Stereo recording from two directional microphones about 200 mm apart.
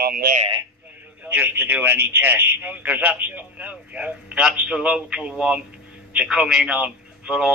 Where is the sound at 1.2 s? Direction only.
10° right (ahead or behind).